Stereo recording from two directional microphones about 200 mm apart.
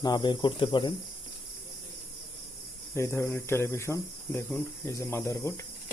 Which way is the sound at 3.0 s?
15° left (ahead or behind).